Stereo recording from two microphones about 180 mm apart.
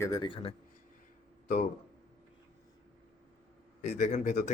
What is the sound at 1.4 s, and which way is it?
Speech, 50° left (ahead or behind).